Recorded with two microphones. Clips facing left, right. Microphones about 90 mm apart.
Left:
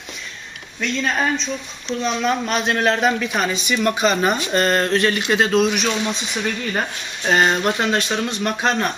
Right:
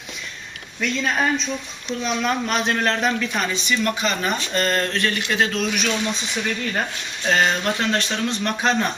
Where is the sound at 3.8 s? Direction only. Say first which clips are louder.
Left 8 dB; 25° left (ahead or behind).